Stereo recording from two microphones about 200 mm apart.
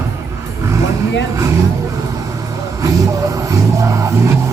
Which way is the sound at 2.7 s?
15° right (ahead or behind).